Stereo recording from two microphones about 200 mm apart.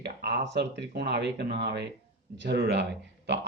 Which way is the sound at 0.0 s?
55° right (ahead or behind).